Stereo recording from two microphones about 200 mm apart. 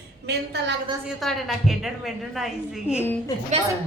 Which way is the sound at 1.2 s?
Centre (ahead or behind).